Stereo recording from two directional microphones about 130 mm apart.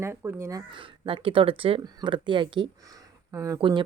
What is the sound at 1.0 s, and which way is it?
A woman's voice, 40° right (ahead or behind).